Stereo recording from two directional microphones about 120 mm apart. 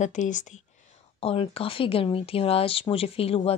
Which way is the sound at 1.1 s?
55° left (ahead or behind).